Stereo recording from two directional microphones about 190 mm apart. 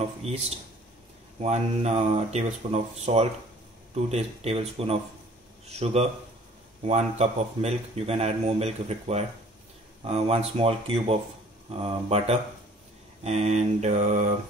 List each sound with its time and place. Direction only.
0.2 s speech: 35° right (ahead or behind)